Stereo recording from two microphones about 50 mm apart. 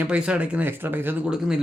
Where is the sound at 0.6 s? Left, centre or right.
Right.